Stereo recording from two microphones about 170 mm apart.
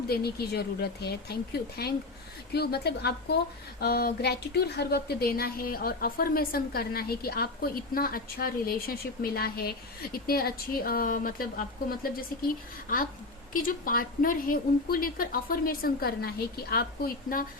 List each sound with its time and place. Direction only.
0.1 s a woman's voice: 65° left (ahead or behind)